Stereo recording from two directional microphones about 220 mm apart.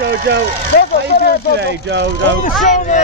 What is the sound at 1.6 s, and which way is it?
Speech, 50° right (ahead or behind).